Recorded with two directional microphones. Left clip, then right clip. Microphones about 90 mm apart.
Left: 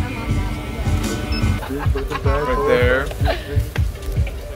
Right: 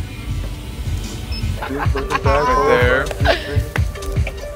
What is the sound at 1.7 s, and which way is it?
Music, 25° right (ahead or behind).